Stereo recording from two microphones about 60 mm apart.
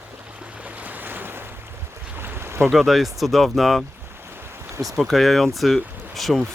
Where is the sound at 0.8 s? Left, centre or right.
Right.